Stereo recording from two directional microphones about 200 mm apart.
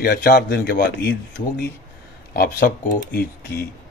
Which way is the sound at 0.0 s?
50° left (ahead or behind).